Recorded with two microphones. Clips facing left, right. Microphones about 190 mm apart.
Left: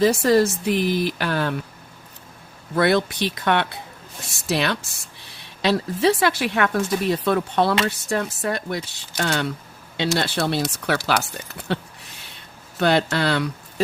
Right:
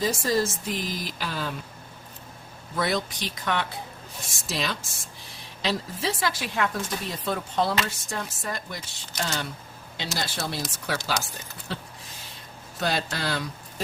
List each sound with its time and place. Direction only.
0.0 s speech: 65° left (ahead or behind)
2.7 s speech: 65° left (ahead or behind)
12.8 s speech: 65° left (ahead or behind)